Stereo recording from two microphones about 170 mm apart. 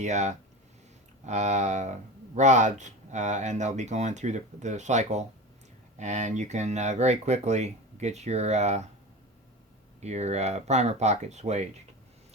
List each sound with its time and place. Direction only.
0.0 s speech: 45° right (ahead or behind)
10.0 s speech: 40° right (ahead or behind)